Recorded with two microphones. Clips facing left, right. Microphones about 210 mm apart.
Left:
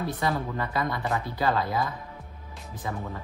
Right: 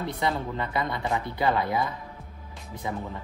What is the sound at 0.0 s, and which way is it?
Speech, 20° right (ahead or behind).